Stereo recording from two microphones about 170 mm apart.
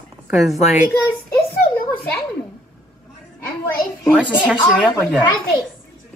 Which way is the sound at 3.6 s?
15° left (ahead or behind).